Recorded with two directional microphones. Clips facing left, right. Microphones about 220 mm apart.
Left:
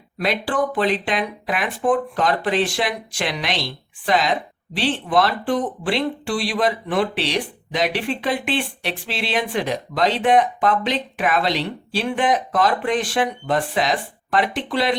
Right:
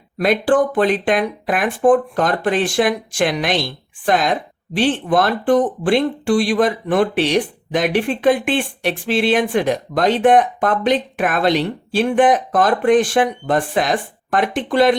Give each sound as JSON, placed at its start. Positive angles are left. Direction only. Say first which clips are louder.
{"t": 0.2, "sound": "speech", "louder": "right 7 dB", "side_deg": -50}